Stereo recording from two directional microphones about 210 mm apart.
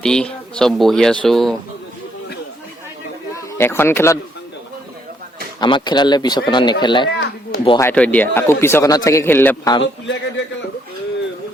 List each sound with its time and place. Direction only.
0.0 s speech: 5° left (ahead or behind)
3.3 s speech: 10° left (ahead or behind)
5.5 s speech: 20° left (ahead or behind)
7.8 s speech: 10° left (ahead or behind)
9.8 s a man's voice: 60° left (ahead or behind)